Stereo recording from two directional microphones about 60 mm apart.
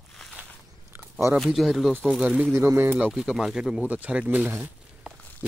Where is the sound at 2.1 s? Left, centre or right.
Centre.